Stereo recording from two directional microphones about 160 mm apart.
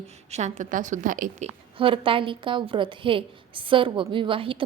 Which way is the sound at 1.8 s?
35° right (ahead or behind).